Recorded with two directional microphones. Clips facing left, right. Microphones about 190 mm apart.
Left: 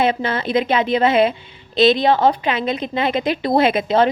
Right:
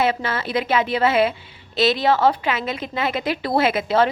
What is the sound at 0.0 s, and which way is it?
A woman's voice, 25° left (ahead or behind).